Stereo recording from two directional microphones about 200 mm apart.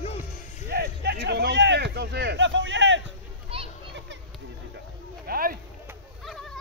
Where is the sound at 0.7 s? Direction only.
55° right (ahead or behind).